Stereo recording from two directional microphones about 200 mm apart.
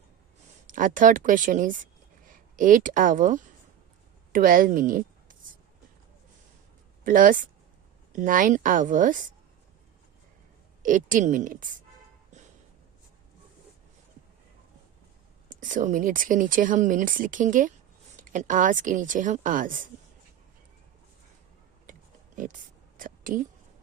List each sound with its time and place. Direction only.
0.7 s a woman's voice: 40° right (ahead or behind)
7.0 s speech: 40° right (ahead or behind)
10.8 s speech: 40° right (ahead or behind)
15.4 s speech: 40° right (ahead or behind)
22.4 s a sound: 40° right (ahead or behind)